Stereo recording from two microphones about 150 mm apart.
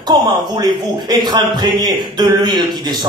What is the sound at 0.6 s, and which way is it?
Speech, 30° right (ahead or behind).